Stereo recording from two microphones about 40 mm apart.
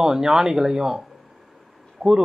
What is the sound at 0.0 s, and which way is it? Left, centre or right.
Speech, centre.